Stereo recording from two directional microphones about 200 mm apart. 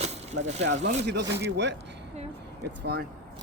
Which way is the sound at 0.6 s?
60° right (ahead or behind).